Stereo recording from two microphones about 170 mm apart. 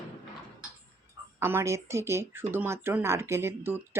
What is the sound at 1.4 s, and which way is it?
Speech, 15° right (ahead or behind).